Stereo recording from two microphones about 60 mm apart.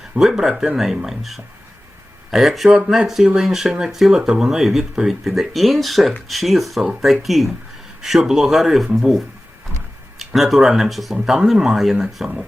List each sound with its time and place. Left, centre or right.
0.2 s speech: centre